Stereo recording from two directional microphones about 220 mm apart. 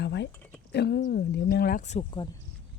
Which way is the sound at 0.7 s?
50° left (ahead or behind).